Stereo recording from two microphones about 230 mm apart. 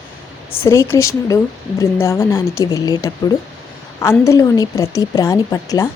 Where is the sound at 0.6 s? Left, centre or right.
Centre.